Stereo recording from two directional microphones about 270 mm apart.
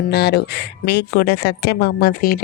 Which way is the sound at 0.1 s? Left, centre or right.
Left.